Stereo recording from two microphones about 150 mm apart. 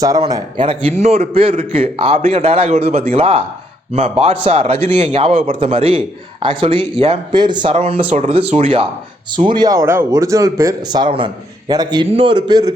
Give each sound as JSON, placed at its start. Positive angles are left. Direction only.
{"t": 0.0, "sound": "a man's voice", "side_deg": -25}